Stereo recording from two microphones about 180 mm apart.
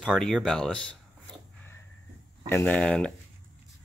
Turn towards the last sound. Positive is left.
turn(degrees=5)  # may be behind; listen again after turning